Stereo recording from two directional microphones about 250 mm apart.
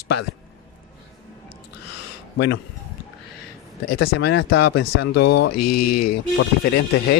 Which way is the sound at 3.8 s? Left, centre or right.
Left.